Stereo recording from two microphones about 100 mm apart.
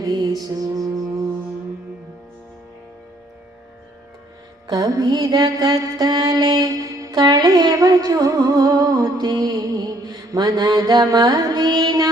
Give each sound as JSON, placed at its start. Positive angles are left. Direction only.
{"t": 0.0, "sound": "mantra", "side_deg": -35}
{"t": 4.6, "sound": "mantra", "side_deg": -35}